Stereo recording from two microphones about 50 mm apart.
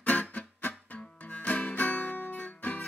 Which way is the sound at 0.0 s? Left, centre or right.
Left.